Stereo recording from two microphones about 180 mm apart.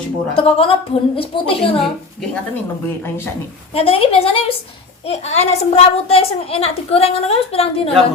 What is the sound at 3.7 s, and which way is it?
A child's voice, 30° left (ahead or behind).